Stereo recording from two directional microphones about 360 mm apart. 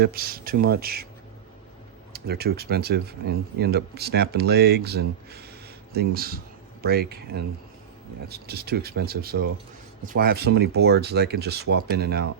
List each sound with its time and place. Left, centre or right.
0.0 s speech: right
2.1 s speech: right